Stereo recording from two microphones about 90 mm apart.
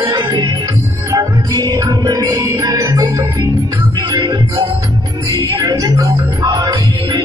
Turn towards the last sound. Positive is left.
turn(degrees=-50)  # may be behind; listen again after turning